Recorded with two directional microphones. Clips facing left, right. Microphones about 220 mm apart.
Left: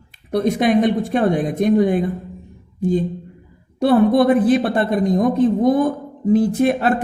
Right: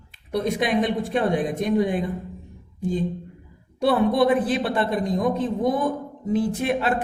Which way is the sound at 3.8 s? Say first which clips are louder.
Left 5 dB; 45° left (ahead or behind).